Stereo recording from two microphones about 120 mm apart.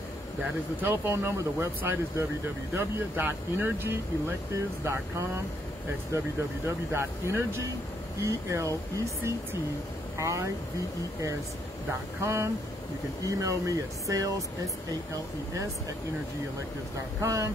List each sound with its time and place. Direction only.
0.4 s speech: 15° right (ahead or behind)
6.6 s speech: 20° right (ahead or behind)
12.2 s speech: 25° right (ahead or behind)
17.2 s speech: 25° right (ahead or behind)